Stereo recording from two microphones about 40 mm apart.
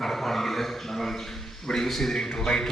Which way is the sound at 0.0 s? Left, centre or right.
Centre.